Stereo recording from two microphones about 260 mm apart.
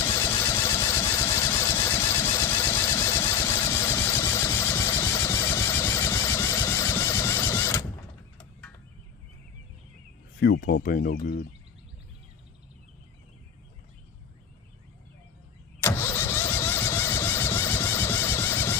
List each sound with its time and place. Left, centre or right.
0.0 s vehicle: centre
0.5 s engine: centre
10.4 s speech: left
15.8 s vehicle: centre